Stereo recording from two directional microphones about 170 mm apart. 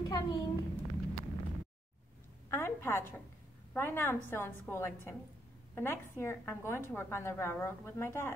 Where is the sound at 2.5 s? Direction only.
15° left (ahead or behind).